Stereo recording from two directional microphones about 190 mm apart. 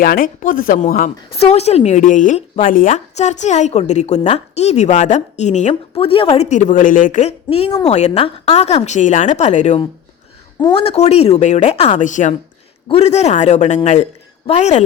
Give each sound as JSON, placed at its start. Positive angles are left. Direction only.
{"t": 0.0, "sound": "speech", "side_deg": 50}
{"t": 1.3, "sound": "speech", "side_deg": 30}